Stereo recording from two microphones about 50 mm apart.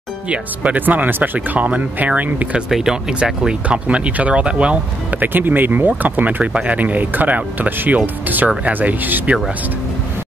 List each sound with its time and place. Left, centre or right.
0.7 s speech: right
2.7 s speech: centre
3.6 s speech: right
5.1 s speech: right